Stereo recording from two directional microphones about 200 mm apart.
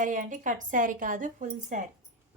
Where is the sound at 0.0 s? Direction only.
40° right (ahead or behind).